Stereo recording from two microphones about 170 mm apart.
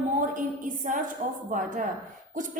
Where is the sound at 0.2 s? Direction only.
50° right (ahead or behind).